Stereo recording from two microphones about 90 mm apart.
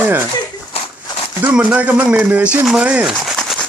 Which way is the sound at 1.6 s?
15° right (ahead or behind).